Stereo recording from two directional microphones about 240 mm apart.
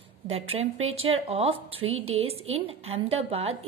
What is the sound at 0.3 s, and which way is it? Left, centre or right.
A woman's voice, right.